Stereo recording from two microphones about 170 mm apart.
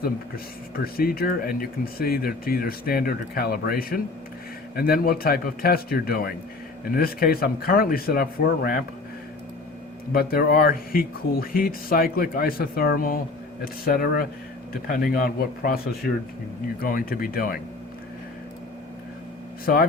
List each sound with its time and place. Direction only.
0.9 s speech: 60° left (ahead or behind)
10.1 s speech: 60° left (ahead or behind)
19.6 s speech: 60° left (ahead or behind)